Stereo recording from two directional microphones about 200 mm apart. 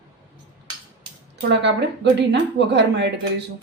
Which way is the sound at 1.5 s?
60° right (ahead or behind).